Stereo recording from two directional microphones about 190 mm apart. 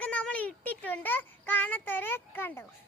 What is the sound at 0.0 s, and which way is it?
Child singing, 5° left (ahead or behind).